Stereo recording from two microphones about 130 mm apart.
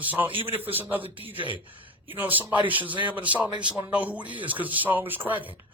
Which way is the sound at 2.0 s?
15° right (ahead or behind).